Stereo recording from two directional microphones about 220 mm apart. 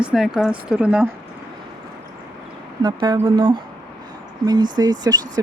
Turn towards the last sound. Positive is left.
turn(degrees=-20)  # may be behind; listen again after turning